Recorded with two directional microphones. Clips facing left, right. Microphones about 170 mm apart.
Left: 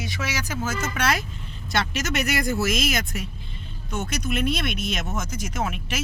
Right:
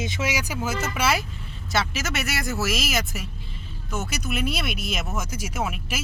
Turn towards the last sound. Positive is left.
turn(degrees=-5)  # may be behind; listen again after turning